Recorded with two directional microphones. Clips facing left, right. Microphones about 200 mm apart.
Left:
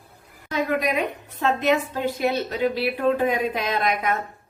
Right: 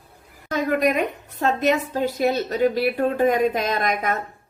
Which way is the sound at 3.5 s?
45° right (ahead or behind).